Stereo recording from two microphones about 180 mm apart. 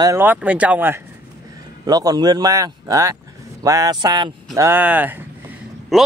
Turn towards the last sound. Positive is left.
turn(degrees=0)  # may be behind; listen again after turning